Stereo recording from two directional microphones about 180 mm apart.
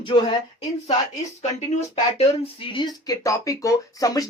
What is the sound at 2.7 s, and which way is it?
Speech, 25° left (ahead or behind).